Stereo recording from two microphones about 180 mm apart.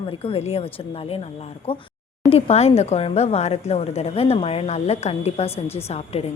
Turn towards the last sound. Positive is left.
turn(degrees=35)  # may be behind; listen again after turning